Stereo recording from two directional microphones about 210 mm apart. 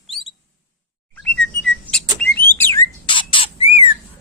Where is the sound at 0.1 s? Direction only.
Centre (ahead or behind).